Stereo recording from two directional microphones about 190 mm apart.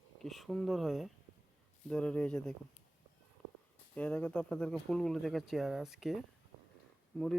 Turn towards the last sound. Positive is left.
turn(degrees=0)  # may be behind; listen again after turning